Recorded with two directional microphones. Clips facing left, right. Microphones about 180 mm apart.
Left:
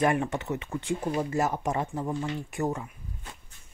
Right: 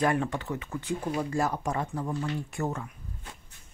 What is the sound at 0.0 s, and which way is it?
Speech, 20° left (ahead or behind).